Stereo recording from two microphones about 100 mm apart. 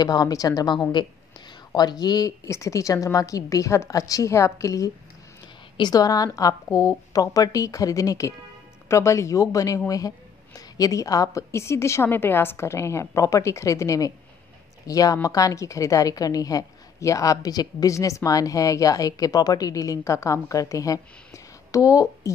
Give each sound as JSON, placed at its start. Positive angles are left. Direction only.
{"t": 0.0, "sound": "a woman's voice", "side_deg": 40}